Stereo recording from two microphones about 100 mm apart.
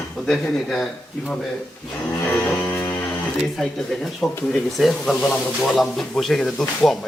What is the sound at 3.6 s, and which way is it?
Speech, 5° left (ahead or behind).